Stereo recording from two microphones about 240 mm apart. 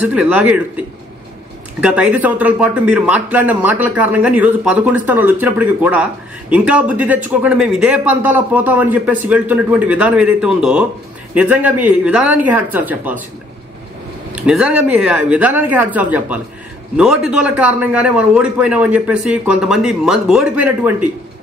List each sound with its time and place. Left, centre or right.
0.0 s speech: centre
14.3 s speech: centre